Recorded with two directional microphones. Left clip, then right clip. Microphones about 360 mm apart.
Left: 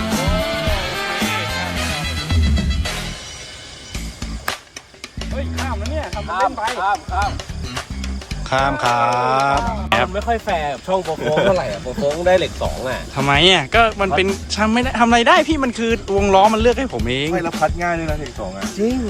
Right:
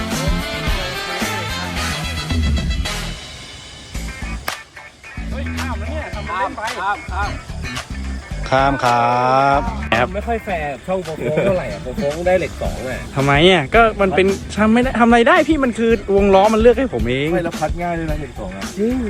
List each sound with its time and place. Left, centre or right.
0.1 s music: centre
6.3 s music: left
7.3 s music: centre
8.4 s speech: centre
12.2 s speech: centre
18.8 s speech: left